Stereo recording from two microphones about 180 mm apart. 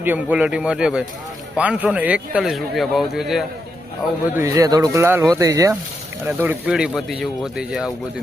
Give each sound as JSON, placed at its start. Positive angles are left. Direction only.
{"t": 0.0, "sound": "a man's voice", "side_deg": -10}
{"t": 4.4, "sound": "a man's voice", "side_deg": -15}